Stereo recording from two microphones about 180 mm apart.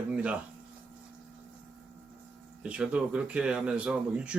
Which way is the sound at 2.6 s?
5° right (ahead or behind).